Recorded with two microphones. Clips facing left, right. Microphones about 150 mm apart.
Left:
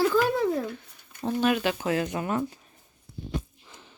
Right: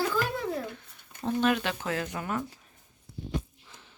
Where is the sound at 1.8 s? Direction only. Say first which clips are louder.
Left 5 dB; 20° left (ahead or behind).